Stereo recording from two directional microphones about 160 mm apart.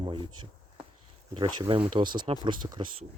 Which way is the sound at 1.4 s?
30° right (ahead or behind).